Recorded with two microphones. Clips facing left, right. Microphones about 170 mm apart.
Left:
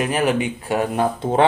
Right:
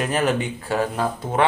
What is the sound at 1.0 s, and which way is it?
Speech, 30° left (ahead or behind).